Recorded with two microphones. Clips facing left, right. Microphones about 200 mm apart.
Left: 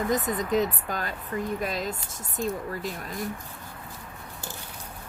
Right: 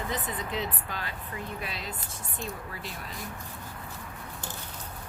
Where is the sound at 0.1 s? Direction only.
45° left (ahead or behind).